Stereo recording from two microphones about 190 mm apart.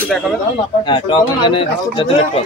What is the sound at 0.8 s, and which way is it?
Speech, 25° left (ahead or behind).